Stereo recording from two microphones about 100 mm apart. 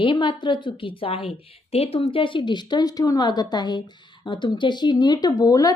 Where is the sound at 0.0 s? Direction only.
55° left (ahead or behind).